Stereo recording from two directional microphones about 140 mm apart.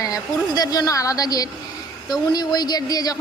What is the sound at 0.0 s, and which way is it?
A woman's voice, 25° left (ahead or behind).